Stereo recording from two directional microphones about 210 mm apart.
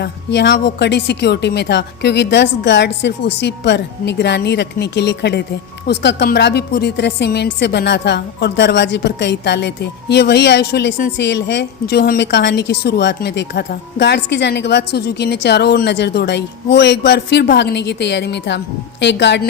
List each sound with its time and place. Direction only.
0.0 s a woman's voice: 55° left (ahead or behind)